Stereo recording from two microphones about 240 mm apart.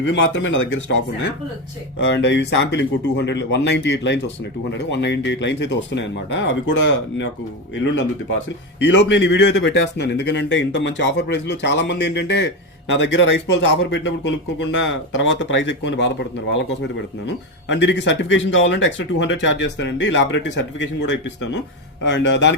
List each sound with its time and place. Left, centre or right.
0.0 s speech: left
2.0 s speech: left
8.8 s speech: left
17.2 s speech: left